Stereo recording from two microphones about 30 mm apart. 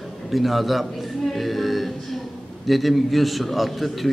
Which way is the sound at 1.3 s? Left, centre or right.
Centre.